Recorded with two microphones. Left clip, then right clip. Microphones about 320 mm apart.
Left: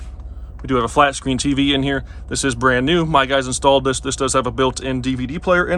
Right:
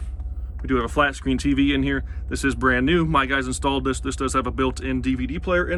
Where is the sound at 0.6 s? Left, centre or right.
Centre.